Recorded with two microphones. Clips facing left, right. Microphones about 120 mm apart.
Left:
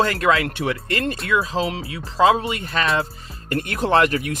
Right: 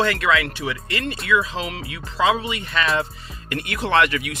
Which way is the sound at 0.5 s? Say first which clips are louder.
Left 4 dB; 55° left (ahead or behind).